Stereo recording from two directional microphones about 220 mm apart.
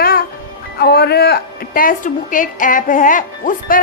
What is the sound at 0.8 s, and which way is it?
A woman's voice, 45° left (ahead or behind).